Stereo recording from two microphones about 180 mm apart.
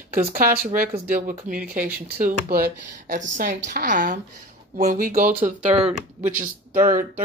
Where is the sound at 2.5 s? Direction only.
55° right (ahead or behind).